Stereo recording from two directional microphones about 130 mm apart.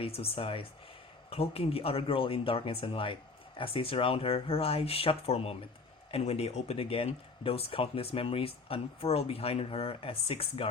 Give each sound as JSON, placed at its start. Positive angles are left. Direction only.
{"t": 0.0, "sound": "speech", "side_deg": 50}